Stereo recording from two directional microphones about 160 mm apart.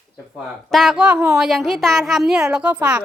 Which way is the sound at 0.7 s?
Centre (ahead or behind).